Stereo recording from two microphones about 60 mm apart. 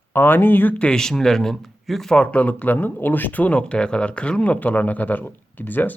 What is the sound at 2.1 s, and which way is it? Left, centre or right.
Speech, centre.